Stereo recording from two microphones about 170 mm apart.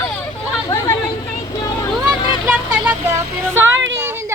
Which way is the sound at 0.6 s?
20° left (ahead or behind).